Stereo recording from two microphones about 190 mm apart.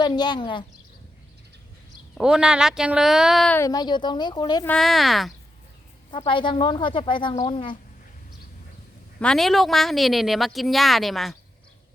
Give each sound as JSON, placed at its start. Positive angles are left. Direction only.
{"t": 0.0, "sound": "speech", "side_deg": 25}
{"t": 2.1, "sound": "a woman's voice", "side_deg": -5}
{"t": 3.6, "sound": "speech", "side_deg": 20}
{"t": 4.6, "sound": "a woman's voice", "side_deg": 5}
{"t": 6.1, "sound": "speech", "side_deg": 25}
{"t": 9.2, "sound": "a woman's voice", "side_deg": 0}